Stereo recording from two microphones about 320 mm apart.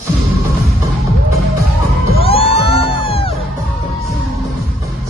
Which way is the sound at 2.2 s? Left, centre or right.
Centre.